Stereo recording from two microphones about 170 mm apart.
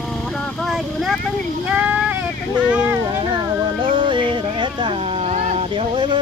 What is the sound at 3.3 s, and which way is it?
Music, 30° right (ahead or behind).